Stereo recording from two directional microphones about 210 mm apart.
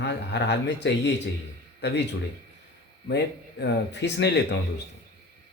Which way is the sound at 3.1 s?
55° left (ahead or behind).